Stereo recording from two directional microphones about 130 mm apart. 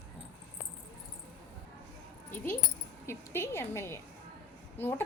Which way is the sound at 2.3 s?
15° left (ahead or behind).